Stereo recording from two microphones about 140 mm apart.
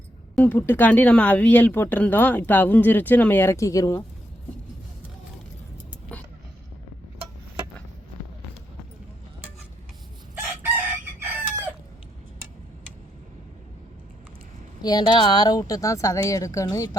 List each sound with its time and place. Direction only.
0.3 s speech: 15° left (ahead or behind)
11.2 s chicken: 15° right (ahead or behind)
14.8 s speech: 30° left (ahead or behind)